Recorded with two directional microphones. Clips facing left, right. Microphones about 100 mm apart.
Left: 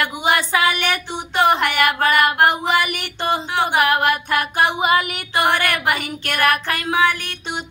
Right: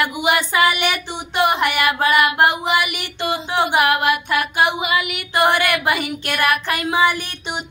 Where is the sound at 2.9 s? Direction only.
40° left (ahead or behind).